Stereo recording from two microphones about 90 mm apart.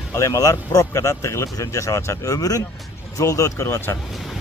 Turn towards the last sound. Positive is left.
turn(degrees=30)  # may be behind; listen again after turning